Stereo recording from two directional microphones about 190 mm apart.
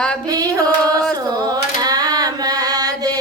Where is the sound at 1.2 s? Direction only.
20° right (ahead or behind).